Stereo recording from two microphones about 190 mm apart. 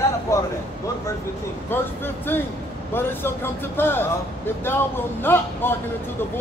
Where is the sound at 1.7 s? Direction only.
10° left (ahead or behind).